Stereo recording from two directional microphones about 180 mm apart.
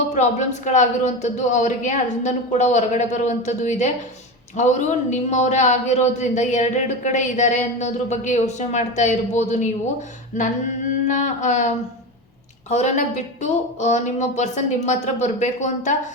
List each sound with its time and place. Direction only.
0.1 s a man's voice: 40° left (ahead or behind)
11.1 s a sound: 45° left (ahead or behind)
12.6 s a man's voice: 40° left (ahead or behind)